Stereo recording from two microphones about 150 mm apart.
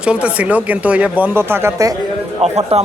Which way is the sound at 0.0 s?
5° right (ahead or behind).